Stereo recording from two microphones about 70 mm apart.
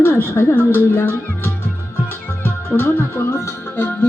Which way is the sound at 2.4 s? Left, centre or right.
Left.